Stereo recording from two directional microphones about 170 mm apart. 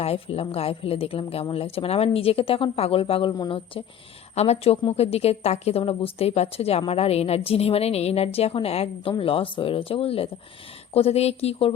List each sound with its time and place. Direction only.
0.0 s speech: 35° left (ahead or behind)